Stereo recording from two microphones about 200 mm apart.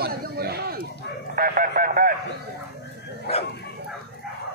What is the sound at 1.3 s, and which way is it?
Speech, 45° right (ahead or behind).